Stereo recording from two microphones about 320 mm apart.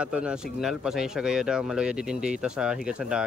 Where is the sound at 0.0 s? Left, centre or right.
Centre.